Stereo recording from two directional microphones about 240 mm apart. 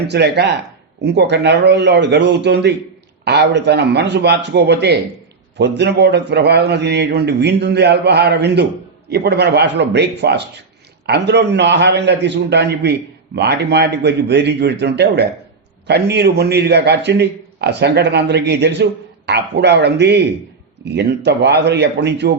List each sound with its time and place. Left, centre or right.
0.1 s a man's voice: right